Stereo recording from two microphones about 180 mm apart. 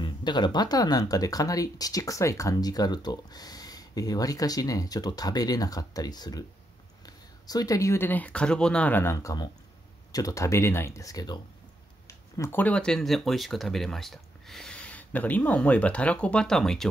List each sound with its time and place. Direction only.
0.0 s speech: 25° left (ahead or behind); by 16.9 s centre (ahead or behind)